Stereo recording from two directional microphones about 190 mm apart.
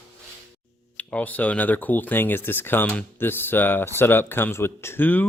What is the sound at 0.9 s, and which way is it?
Speech, 10° left (ahead or behind).